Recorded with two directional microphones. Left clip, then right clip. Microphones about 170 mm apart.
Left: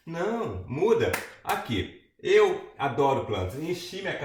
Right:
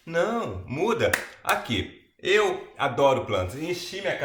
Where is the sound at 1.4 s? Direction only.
10° right (ahead or behind).